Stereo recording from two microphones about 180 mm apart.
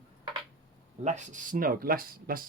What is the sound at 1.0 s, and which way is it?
Speech, 40° right (ahead or behind).